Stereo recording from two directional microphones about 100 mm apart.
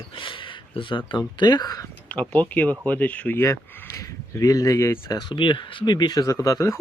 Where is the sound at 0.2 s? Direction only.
60° left (ahead or behind).